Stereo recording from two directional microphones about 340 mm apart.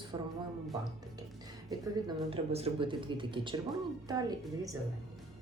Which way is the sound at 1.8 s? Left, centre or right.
Centre.